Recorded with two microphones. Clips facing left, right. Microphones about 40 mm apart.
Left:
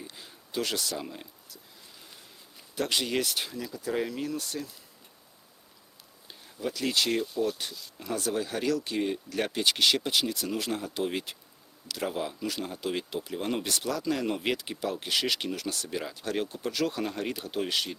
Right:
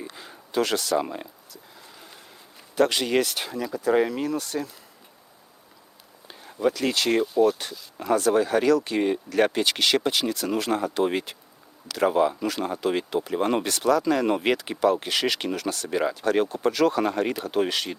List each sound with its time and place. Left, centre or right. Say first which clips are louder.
0.0 s a sound: right 6 dB; right
0.5 s speech: right 7 dB; right
0.9 s speech: right 12 dB; right
2.7 s speech: right 8 dB; right
3.3 s speech: right 5 dB; right
6.4 s speech: right 8 dB; right
7.2 s speech: right 9 dB; right
8.1 s speech: right 10 dB; right
8.8 s speech: right 6 dB; right
10.2 s speech: right 4 dB; right
13.7 s speech: right 10 dB; right
14.3 s speech: right 7 dB; right